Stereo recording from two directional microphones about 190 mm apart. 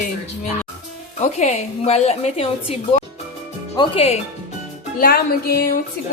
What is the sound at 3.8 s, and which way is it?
Speech, 30° left (ahead or behind).